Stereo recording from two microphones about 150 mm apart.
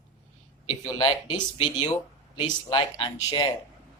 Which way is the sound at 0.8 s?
30° left (ahead or behind).